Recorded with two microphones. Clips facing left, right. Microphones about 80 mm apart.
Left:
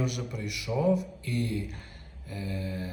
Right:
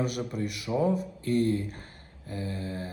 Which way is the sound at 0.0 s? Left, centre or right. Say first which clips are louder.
Right 3 dB; right.